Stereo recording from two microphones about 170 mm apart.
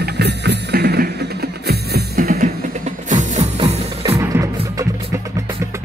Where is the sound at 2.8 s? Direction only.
45° right (ahead or behind).